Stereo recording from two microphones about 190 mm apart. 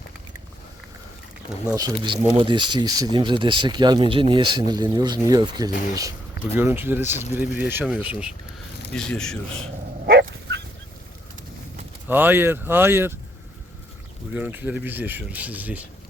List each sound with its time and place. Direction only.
1.6 s speech: 20° right (ahead or behind)
9.0 s speech: 5° left (ahead or behind)
10.1 s dog: 60° right (ahead or behind)
12.0 s speech: 10° right (ahead or behind)
14.3 s speech: 5° right (ahead or behind)